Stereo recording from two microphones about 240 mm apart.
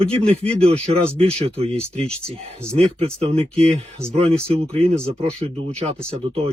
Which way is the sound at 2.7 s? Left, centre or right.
Right.